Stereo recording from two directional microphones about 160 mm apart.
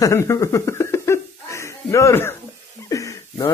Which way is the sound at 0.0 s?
20° left (ahead or behind).